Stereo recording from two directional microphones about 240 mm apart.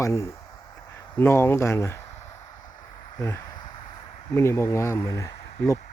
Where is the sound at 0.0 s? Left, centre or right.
Centre.